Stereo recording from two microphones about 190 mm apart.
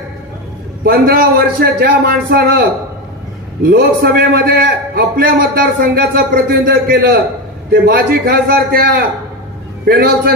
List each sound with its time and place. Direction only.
0.8 s a man's voice: 50° right (ahead or behind)
3.6 s a man's voice: 55° right (ahead or behind)